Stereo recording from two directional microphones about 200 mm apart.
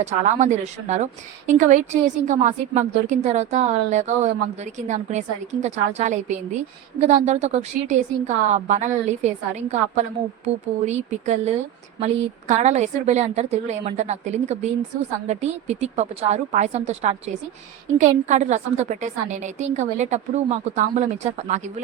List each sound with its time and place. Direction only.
0.0 s a woman's voice: 35° right (ahead or behind)